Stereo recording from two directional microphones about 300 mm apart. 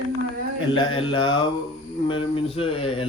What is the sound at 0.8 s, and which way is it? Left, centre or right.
Speech, centre.